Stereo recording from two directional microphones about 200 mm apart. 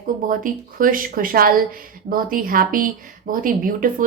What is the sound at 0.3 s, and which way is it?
A woman's voice, 45° right (ahead or behind).